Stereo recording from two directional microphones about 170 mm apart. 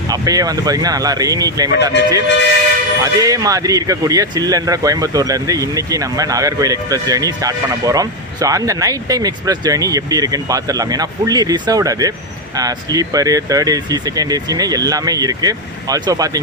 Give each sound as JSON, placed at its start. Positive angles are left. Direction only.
{"t": 0.1, "sound": "speech", "side_deg": -20}
{"t": 3.0, "sound": "speech", "side_deg": -20}